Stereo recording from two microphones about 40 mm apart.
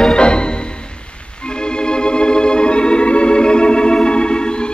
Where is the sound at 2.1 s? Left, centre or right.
Left.